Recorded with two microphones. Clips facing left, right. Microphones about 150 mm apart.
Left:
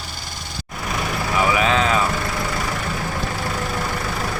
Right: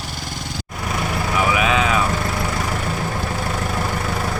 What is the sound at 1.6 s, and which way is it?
Vehicle, 5° right (ahead or behind).